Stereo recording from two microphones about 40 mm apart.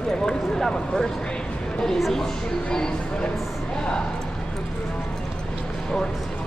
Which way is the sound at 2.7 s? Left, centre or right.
Centre.